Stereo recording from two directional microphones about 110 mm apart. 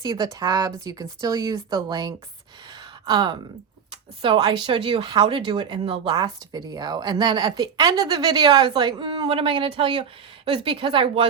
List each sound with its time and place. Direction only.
0.0 s a woman's voice: 40° right (ahead or behind)
6.1 s a woman's voice: 35° right (ahead or behind); by 11.3 s 55° right (ahead or behind)